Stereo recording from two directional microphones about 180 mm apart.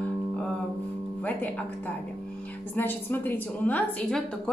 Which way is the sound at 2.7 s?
10° left (ahead or behind).